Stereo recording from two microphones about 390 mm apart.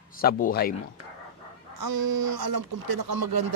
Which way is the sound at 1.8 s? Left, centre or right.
Right.